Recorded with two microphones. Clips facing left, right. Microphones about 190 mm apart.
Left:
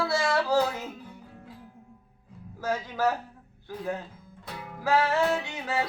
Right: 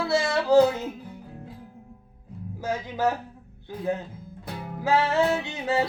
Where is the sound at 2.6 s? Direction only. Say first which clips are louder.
Right 1 dB; 15° right (ahead or behind).